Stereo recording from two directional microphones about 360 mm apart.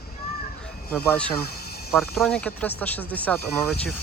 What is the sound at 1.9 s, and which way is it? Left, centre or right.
Speech, centre.